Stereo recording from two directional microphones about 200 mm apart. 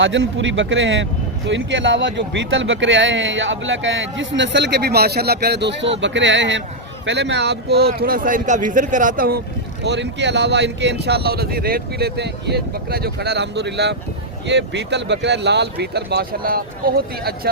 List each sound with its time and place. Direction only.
0.0 s speech: 65° right (ahead or behind); by 9.4 s 45° right (ahead or behind)
9.8 s speech: 60° right (ahead or behind)